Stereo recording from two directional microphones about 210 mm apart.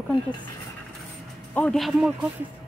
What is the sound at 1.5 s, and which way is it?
Speech, 5° left (ahead or behind).